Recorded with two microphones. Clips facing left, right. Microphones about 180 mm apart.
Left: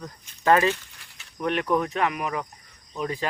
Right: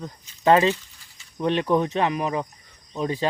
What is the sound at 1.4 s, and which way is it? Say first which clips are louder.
Speech: right 3 dB; 25° right (ahead or behind).